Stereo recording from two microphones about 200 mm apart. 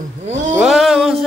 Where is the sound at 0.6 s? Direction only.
Centre (ahead or behind).